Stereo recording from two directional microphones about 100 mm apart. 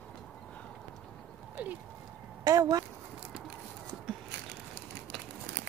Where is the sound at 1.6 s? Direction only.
15° right (ahead or behind).